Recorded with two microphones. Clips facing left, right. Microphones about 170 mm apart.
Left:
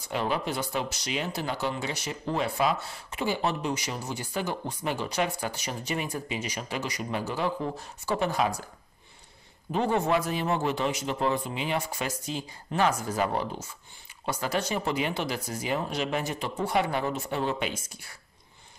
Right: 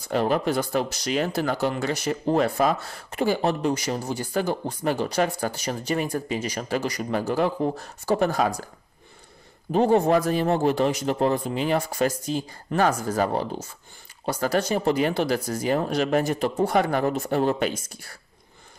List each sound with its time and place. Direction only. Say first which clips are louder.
0.1 s speech: right 7 dB; 45° right (ahead or behind)
9.7 s speech: right 7 dB; 40° right (ahead or behind)